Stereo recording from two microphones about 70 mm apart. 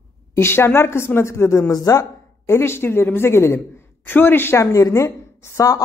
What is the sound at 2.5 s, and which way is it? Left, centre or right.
A woman's voice, left.